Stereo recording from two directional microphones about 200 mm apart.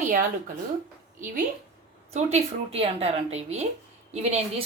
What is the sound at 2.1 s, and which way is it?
A woman's voice, 30° right (ahead or behind).